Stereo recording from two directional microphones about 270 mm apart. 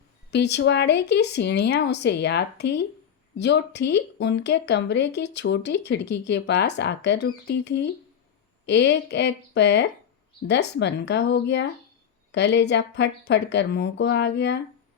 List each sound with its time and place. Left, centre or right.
0.3 s speech: left